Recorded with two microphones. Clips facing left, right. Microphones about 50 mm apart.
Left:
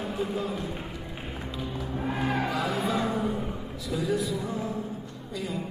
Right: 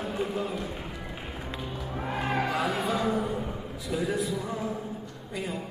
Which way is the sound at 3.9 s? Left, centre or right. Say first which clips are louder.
Left 1 dB; right.